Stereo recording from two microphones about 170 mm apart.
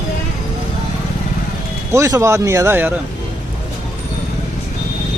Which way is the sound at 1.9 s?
20° right (ahead or behind).